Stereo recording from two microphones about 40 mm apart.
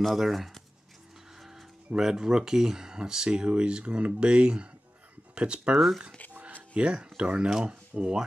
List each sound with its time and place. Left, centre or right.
0.0 s speech: centre
2.0 s speech: centre
5.8 s speech: centre
6.7 s speech: right
7.6 s speech: right